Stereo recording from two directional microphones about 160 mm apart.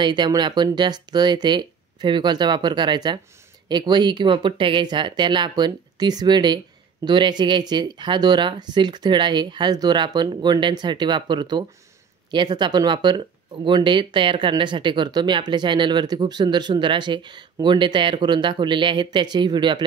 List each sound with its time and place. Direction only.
0.0 s speech: 25° right (ahead or behind)